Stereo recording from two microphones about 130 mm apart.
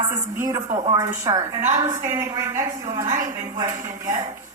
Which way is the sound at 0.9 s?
30° right (ahead or behind).